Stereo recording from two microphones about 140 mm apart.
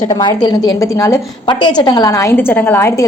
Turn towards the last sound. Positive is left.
turn(degrees=15)  # may be behind; listen again after turning